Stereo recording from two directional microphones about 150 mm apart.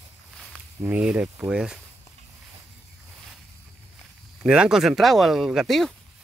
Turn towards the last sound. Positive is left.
turn(degrees=0)  # may be behind; listen again after turning